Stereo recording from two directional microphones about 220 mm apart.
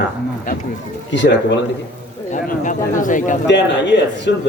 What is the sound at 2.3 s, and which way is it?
Speech, 35° left (ahead or behind).